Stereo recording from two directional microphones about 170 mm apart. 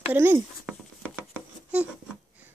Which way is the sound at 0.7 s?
Centre (ahead or behind).